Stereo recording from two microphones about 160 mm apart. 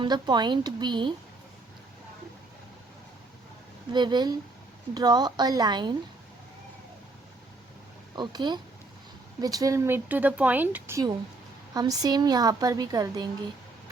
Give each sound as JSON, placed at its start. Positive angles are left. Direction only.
{"t": 0.0, "sound": "a woman's voice", "side_deg": -25}
{"t": 3.9, "sound": "a woman's voice", "side_deg": -25}
{"t": 8.1, "sound": "a woman's voice", "side_deg": -25}